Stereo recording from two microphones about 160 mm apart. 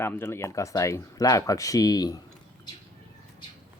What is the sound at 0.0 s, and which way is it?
Speech, 15° left (ahead or behind).